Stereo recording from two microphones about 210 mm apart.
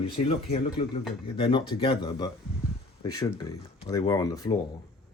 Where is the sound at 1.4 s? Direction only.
25° left (ahead or behind).